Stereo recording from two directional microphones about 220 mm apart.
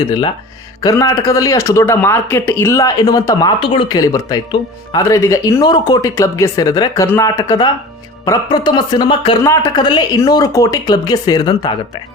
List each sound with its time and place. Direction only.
0.8 s speech: 15° left (ahead or behind)